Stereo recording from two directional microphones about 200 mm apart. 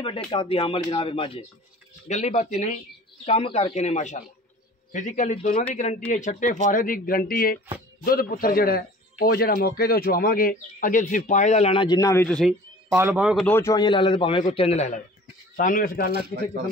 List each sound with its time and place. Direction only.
0.0 s a man's voice: 25° left (ahead or behind); by 12.5 s 5° left (ahead or behind)
12.9 s speech: 10° right (ahead or behind)
13.5 s a man's voice: 15° left (ahead or behind); by 16.1 s 45° left (ahead or behind)